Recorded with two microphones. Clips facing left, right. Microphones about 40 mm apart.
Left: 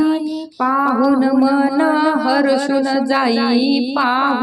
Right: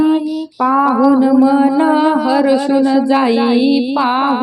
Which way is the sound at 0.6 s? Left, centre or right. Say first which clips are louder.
Right 3 dB; centre.